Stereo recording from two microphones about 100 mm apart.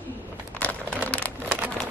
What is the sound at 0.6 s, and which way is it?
Crumpling, 10° left (ahead or behind).